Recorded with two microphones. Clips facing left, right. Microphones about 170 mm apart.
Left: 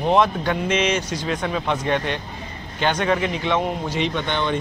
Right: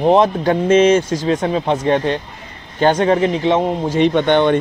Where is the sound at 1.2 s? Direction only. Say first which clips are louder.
Right 7 dB; 30° right (ahead or behind).